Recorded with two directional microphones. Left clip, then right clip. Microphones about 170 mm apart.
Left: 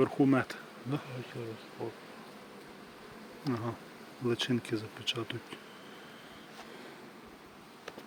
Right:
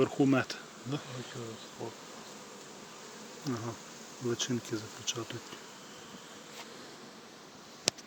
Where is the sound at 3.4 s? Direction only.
15° left (ahead or behind).